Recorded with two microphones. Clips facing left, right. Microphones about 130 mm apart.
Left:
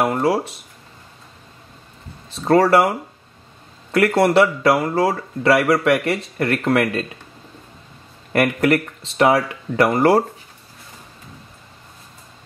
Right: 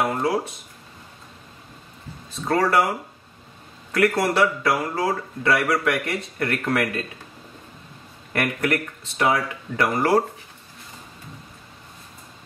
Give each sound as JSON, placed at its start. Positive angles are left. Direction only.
{"t": 0.0, "sound": "a sound", "side_deg": 30}
{"t": 2.3, "sound": "a man's voice", "side_deg": 30}
{"t": 3.9, "sound": "a man's voice", "side_deg": 25}
{"t": 8.4, "sound": "a man's voice", "side_deg": 25}